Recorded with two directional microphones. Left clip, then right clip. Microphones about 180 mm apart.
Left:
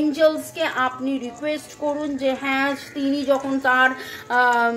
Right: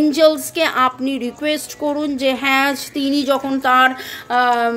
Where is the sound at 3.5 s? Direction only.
40° right (ahead or behind).